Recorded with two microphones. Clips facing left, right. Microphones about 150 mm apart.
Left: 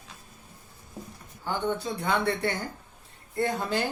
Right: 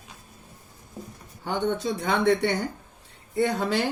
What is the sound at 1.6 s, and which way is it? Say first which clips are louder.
Speech: right 4 dB; 85° right.